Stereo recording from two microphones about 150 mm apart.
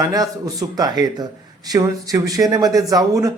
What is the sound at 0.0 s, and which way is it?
Speech, 25° right (ahead or behind).